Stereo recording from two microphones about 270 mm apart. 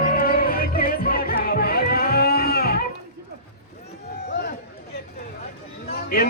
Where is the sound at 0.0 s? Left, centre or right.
Left.